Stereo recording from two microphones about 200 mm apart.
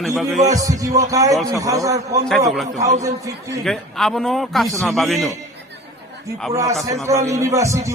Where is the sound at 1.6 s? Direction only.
15° right (ahead or behind).